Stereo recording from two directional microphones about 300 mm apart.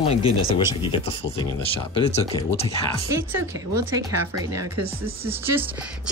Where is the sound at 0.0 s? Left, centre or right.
Centre.